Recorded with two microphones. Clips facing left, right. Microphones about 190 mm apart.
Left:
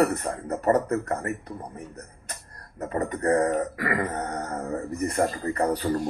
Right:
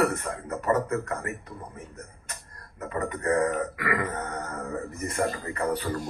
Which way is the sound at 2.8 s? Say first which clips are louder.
Left 3 dB; 35° left (ahead or behind).